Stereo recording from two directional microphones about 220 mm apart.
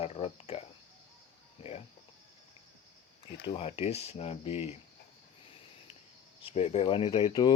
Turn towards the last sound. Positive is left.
turn(degrees=20)  # may be behind; listen again after turning